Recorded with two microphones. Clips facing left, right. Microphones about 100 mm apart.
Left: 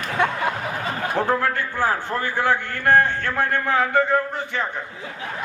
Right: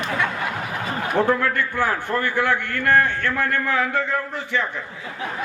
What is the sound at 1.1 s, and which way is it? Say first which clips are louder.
A man's voice: right 2 dB; 15° left (ahead or behind).